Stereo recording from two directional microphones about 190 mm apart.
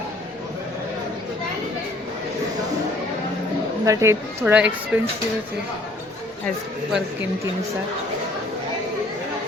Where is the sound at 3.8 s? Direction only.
15° right (ahead or behind).